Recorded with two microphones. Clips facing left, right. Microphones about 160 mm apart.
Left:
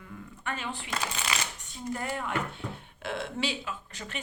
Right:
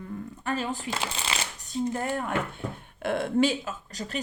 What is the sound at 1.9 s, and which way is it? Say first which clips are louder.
A woman's voice: right 4 dB; 45° right (ahead or behind).